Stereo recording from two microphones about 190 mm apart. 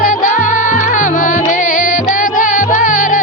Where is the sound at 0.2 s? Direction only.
40° left (ahead or behind).